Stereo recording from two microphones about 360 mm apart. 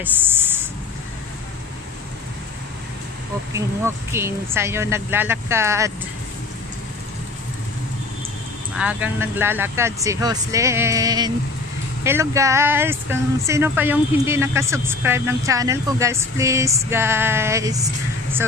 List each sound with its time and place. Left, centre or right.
0.0 s speech: centre
3.5 s speech: centre
8.7 s speech: centre